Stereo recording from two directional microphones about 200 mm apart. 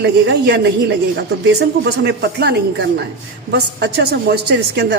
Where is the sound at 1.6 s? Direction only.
55° right (ahead or behind).